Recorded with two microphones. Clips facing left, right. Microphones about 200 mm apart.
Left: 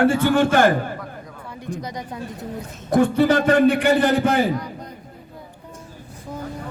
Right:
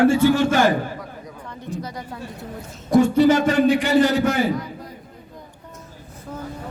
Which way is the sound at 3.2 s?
55° left (ahead or behind).